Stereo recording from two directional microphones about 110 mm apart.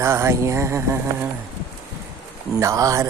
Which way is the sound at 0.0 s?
25° right (ahead or behind).